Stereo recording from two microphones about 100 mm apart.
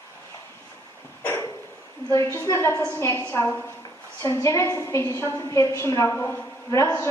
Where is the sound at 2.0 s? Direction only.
35° left (ahead or behind).